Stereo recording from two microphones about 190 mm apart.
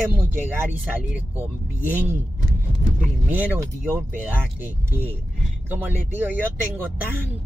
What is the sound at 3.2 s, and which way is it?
Speech, 10° right (ahead or behind).